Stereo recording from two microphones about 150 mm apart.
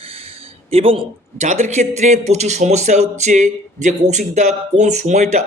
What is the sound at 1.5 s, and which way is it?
Speech, 50° right (ahead or behind).